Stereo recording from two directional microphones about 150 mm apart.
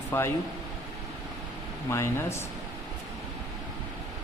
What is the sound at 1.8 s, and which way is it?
Speech, 20° left (ahead or behind).